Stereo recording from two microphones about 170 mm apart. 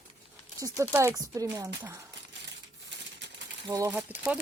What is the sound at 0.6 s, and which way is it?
Speech, 15° right (ahead or behind).